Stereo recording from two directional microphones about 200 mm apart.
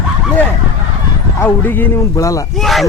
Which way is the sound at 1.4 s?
10° left (ahead or behind).